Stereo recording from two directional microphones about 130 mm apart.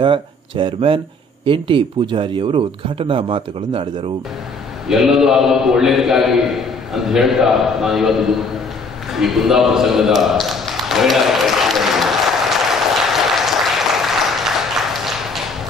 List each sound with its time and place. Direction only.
0.0 s speech: 40° right (ahead or behind)
4.8 s a man's voice: 5° right (ahead or behind)
9.1 s a sound: centre (ahead or behind)